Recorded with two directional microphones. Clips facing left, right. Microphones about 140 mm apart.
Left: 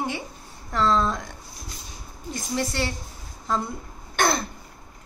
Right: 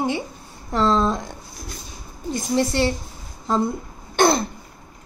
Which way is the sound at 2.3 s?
25° right (ahead or behind).